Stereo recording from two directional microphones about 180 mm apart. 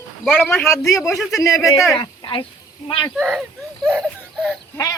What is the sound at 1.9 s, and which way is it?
Speech, 25° left (ahead or behind).